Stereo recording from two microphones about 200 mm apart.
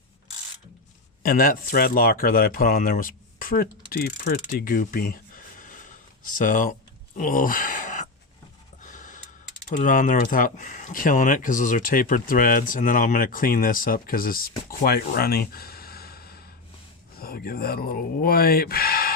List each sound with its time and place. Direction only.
1.2 s speech: 45° left (ahead or behind)
7.2 s a sound: 45° left (ahead or behind)
8.8 s gasp: 40° left (ahead or behind)
9.6 s speech: 40° left (ahead or behind)